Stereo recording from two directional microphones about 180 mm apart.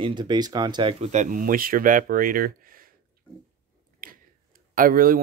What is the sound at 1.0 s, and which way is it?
Speech, 45° right (ahead or behind).